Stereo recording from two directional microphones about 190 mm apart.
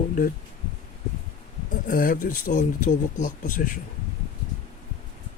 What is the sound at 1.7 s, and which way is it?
Speech, 45° left (ahead or behind).